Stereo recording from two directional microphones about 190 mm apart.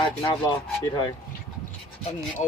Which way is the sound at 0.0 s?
25° left (ahead or behind).